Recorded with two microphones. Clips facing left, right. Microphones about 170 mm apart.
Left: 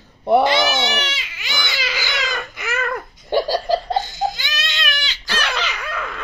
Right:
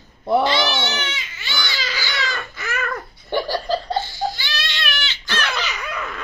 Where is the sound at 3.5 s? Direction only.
15° left (ahead or behind).